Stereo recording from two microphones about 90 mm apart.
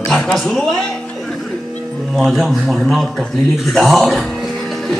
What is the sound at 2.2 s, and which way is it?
Speech, 5° right (ahead or behind).